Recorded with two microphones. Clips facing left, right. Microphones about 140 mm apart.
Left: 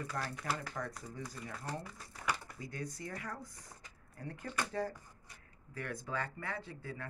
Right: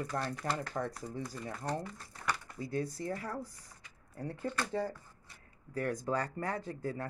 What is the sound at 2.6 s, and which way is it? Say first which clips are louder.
Speech: right 9 dB; 30° right (ahead or behind).